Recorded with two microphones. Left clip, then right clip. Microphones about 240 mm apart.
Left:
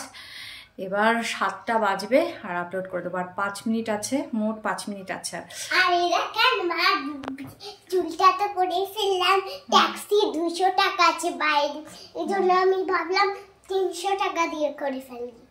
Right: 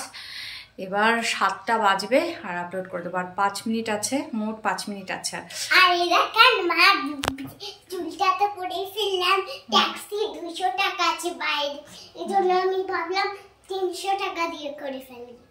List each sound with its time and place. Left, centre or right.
0.7 s a woman's voice: centre
5.7 s a child's voice: centre
8.2 s a child's voice: centre